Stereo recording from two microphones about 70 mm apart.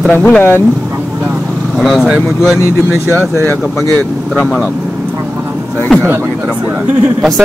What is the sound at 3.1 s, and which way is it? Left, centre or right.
Speech, right.